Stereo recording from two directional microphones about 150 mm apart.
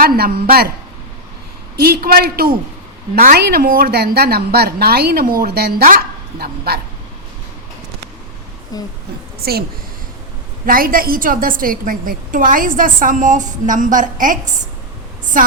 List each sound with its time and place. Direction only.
0.0 s a woman's voice: 75° right (ahead or behind)
1.7 s a woman's voice: 90° right
8.7 s a sound: 25° left (ahead or behind)
9.4 s a woman's voice: 90° right
10.7 s a woman's voice: 75° right (ahead or behind)
15.2 s a sound: 60° right (ahead or behind)